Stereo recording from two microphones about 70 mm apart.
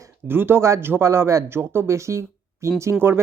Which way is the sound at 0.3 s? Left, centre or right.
Right.